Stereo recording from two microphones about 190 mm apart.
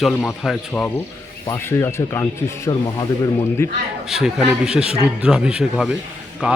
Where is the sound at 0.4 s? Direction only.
10° left (ahead or behind).